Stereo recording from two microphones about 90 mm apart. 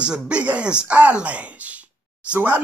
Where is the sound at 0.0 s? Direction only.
10° right (ahead or behind).